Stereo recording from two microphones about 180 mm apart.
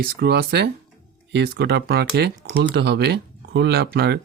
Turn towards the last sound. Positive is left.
turn(degrees=-65)  # may be behind; listen again after turning